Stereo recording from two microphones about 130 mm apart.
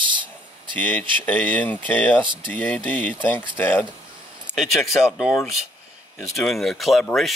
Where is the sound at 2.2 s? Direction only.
40° right (ahead or behind).